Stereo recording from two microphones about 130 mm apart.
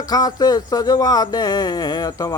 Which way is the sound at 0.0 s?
30° left (ahead or behind).